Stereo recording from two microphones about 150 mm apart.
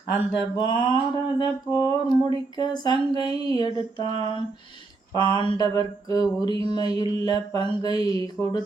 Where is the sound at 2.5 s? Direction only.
30° left (ahead or behind).